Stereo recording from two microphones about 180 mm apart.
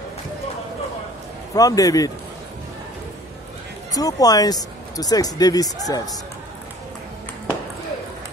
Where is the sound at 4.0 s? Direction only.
20° left (ahead or behind).